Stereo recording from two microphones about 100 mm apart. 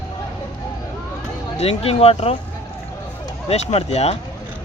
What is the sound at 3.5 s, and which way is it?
Speech, 90° left.